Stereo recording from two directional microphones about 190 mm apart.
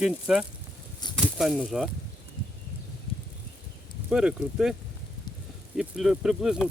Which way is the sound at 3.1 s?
30° left (ahead or behind).